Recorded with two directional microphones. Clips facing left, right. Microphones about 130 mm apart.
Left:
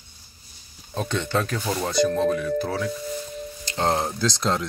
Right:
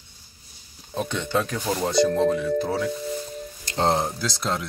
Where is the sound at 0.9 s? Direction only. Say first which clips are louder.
Even; 10° right (ahead or behind).